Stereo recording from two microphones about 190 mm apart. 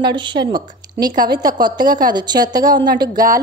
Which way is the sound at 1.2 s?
20° right (ahead or behind).